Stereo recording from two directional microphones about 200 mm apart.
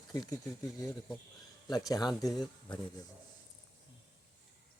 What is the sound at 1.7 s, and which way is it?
Speech, 20° left (ahead or behind).